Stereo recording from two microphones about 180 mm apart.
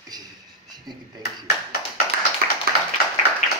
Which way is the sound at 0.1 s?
20° right (ahead or behind).